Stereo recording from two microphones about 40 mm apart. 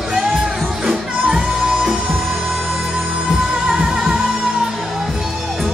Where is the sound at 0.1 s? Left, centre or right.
Centre.